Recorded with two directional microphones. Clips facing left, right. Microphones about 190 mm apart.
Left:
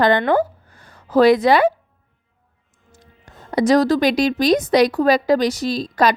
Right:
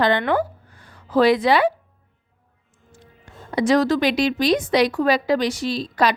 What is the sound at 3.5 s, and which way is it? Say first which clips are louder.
A woman's voice: left 3 dB; 40° left (ahead or behind).